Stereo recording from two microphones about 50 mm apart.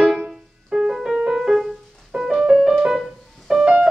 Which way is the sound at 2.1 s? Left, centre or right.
Centre.